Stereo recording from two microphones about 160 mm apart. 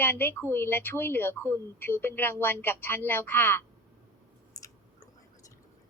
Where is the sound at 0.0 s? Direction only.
15° left (ahead or behind).